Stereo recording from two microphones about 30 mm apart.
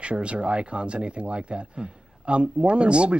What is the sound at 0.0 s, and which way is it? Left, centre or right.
Speech, right.